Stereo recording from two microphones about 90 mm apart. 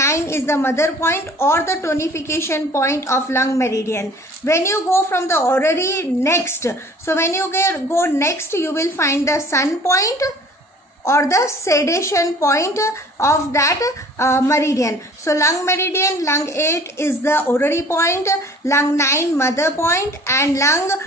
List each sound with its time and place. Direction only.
0.0 s a woman's voice: 30° left (ahead or behind)